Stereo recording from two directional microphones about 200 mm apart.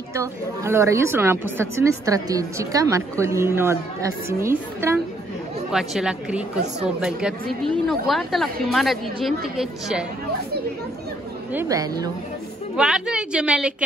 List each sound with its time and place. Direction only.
0.1 s a woman's voice: 15° right (ahead or behind)
5.7 s a woman's voice: centre (ahead or behind)
11.5 s a woman's voice: 15° right (ahead or behind)
12.7 s a woman's voice: 5° right (ahead or behind)